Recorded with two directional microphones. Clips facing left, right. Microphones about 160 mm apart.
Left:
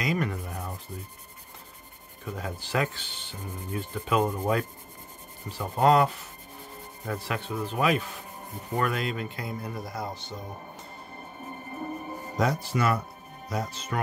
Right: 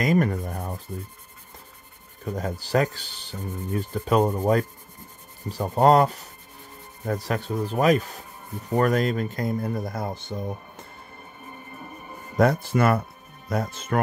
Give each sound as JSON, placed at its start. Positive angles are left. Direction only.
{"t": 0.0, "sound": "rub", "side_deg": -45}
{"t": 2.2, "sound": "speech", "side_deg": -40}
{"t": 12.4, "sound": "speech", "side_deg": -55}